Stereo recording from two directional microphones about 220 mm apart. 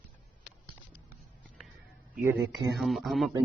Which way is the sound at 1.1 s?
Centre (ahead or behind).